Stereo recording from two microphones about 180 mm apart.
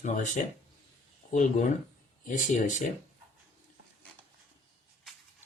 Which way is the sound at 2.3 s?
45° left (ahead or behind).